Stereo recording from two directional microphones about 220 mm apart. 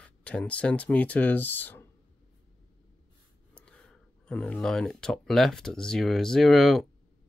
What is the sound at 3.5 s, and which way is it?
Speech, 5° left (ahead or behind).